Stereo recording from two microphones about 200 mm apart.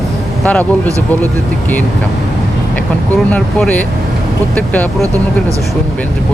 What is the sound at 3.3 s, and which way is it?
Speech, 5° left (ahead or behind).